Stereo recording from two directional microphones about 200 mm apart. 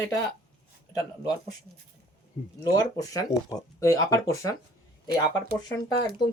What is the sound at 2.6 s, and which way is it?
Speech, 20° left (ahead or behind).